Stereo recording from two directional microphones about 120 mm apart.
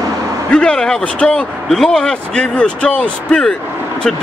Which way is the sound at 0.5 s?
5° left (ahead or behind).